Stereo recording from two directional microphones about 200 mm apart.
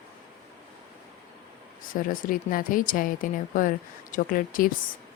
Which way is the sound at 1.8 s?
45° left (ahead or behind).